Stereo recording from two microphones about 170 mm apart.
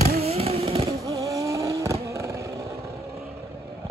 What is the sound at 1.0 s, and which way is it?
Vehicle, 20° right (ahead or behind).